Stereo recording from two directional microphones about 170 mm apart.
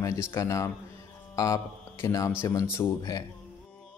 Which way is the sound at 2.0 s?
15° left (ahead or behind).